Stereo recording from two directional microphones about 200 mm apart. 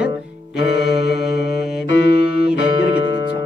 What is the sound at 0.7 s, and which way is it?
Music, 55° left (ahead or behind).